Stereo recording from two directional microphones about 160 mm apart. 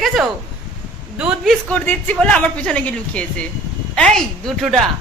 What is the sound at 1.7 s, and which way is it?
A woman's voice, 10° left (ahead or behind).